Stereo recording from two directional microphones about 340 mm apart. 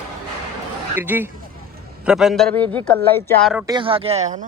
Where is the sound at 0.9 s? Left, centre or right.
Centre.